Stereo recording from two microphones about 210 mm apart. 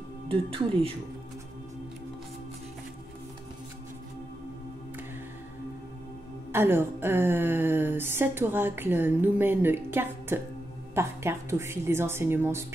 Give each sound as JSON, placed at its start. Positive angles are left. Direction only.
{"t": 0.3, "sound": "speech", "side_deg": -25}
{"t": 6.5, "sound": "a woman's voice", "side_deg": -10}